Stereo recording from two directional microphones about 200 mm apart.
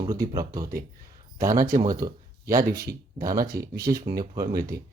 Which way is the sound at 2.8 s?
50° right (ahead or behind).